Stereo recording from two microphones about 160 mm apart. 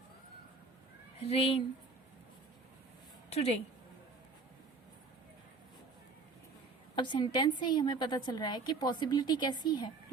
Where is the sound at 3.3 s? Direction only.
40° left (ahead or behind).